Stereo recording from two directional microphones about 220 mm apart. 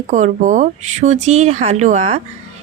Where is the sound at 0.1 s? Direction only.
35° right (ahead or behind).